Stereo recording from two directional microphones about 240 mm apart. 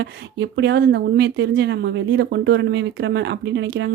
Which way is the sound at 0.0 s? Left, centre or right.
Right.